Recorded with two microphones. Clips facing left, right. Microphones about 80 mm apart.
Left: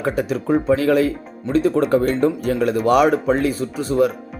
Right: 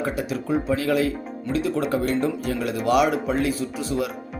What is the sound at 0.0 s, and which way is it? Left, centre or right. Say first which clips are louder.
Speech: left 5 dB; left.